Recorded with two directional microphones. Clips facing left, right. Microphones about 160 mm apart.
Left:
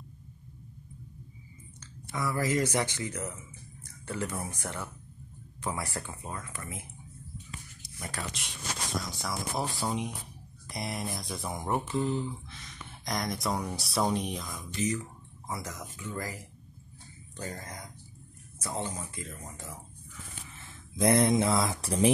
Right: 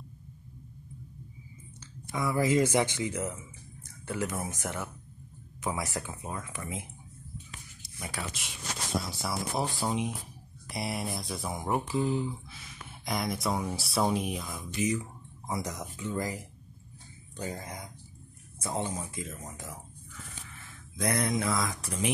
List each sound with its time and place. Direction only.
2.2 s speech: 15° right (ahead or behind)
8.0 s speech: 5° right (ahead or behind)
21.0 s mantra: 25° left (ahead or behind)